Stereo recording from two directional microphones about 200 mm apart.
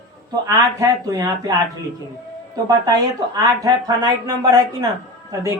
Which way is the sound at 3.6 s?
20° right (ahead or behind).